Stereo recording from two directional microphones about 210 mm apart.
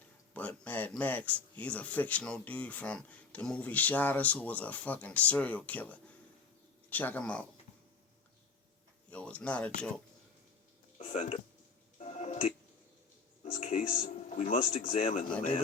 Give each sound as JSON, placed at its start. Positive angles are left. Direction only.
{"t": 0.3, "sound": "speech", "side_deg": 5}
{"t": 9.0, "sound": "speech", "side_deg": 5}
{"t": 10.9, "sound": "speech", "side_deg": 30}
{"t": 11.9, "sound": "music", "side_deg": 30}
{"t": 13.4, "sound": "speech", "side_deg": 35}